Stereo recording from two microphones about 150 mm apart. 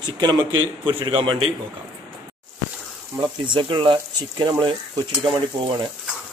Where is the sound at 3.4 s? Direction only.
30° right (ahead or behind).